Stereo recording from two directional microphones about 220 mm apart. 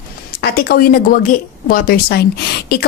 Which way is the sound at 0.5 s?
40° left (ahead or behind).